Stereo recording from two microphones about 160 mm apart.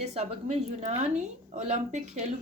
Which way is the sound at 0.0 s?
40° right (ahead or behind).